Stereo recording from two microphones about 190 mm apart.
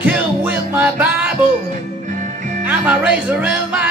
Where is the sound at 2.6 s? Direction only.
5° right (ahead or behind).